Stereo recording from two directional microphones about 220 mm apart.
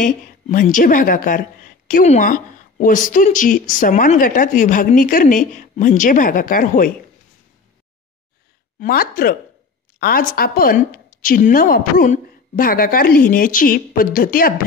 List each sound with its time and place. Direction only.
0.0 s a woman's voice: 35° left (ahead or behind)
8.7 s a woman's voice: 40° left (ahead or behind)